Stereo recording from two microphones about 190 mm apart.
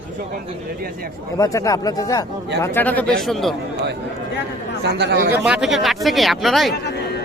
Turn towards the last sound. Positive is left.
turn(degrees=60)  # may be behind; listen again after turning